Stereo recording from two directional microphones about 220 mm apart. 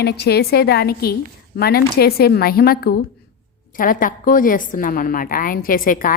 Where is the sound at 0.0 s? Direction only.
50° left (ahead or behind).